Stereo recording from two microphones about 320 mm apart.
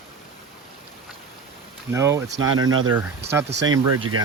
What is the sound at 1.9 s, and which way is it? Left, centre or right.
Speech, centre.